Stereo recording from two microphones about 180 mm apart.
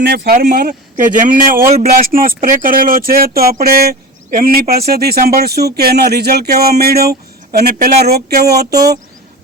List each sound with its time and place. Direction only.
0.0 s speech: 60° right (ahead or behind)
8.5 s speech: 20° right (ahead or behind)